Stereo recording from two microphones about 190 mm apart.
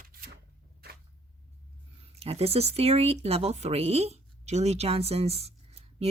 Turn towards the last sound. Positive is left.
turn(degrees=-30)  # may be behind; listen again after turning